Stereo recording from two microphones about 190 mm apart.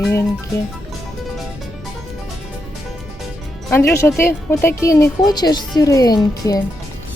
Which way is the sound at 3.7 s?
15° left (ahead or behind).